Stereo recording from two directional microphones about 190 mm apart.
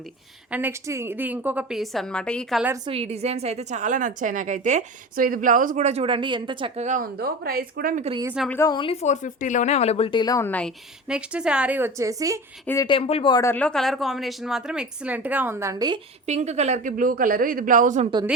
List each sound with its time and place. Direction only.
0.5 s a woman's voice: 10° right (ahead or behind)
2.8 s a woman's voice: 30° right (ahead or behind)
6.7 s speech: 40° right (ahead or behind)
8.5 s speech: 20° left (ahead or behind)
11.1 s a woman's voice: 5° right (ahead or behind)
12.6 s speech: 15° left (ahead or behind)
12.9 s speech: 30° left (ahead or behind); by 16.0 s 20° right (ahead or behind)
16.2 s speech: 35° right (ahead or behind)